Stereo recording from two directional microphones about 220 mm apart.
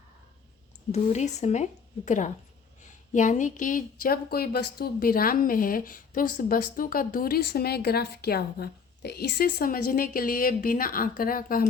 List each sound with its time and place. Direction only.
0.9 s a woman's voice: 30° left (ahead or behind)